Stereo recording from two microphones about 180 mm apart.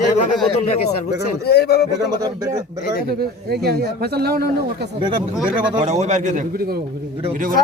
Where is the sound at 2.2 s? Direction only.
20° right (ahead or behind).